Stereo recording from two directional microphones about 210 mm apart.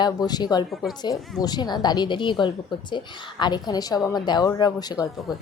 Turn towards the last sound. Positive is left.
turn(degrees=20)  # may be behind; listen again after turning